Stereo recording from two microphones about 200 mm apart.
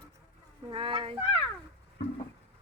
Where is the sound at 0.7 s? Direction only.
25° right (ahead or behind).